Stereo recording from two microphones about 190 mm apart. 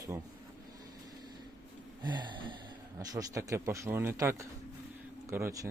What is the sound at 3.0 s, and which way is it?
A man's voice, 15° right (ahead or behind).